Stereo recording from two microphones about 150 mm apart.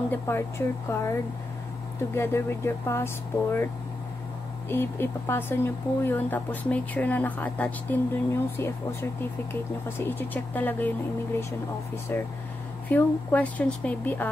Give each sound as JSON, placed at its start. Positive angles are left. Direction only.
{"t": 0.1, "sound": "speech", "side_deg": 15}
{"t": 2.1, "sound": "speech", "side_deg": 15}
{"t": 4.6, "sound": "speech", "side_deg": 15}
{"t": 12.1, "sound": "speech", "side_deg": 15}